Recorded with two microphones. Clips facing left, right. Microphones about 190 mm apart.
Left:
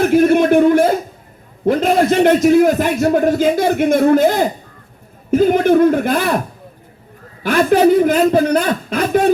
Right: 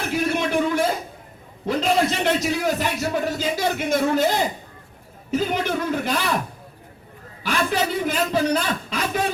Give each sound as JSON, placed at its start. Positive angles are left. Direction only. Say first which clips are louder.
{"t": 0.0, "sound": "a sound", "louder": "left 12 dB", "side_deg": 50}
{"t": 1.6, "sound": "a man's voice", "louder": "left 7 dB", "side_deg": 55}
{"t": 7.4, "sound": "a man's voice", "louder": "left 12 dB", "side_deg": 55}